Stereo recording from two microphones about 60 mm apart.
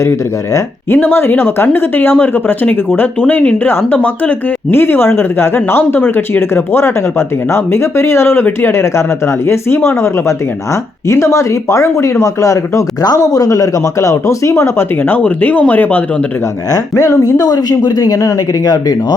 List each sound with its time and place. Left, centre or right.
0.0 s speech: left
0.9 s speech: left
15.2 s speech: left
16.7 s speech: left